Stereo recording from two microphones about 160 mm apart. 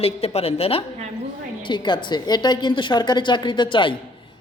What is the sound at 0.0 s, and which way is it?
A woman's voice, 40° left (ahead or behind).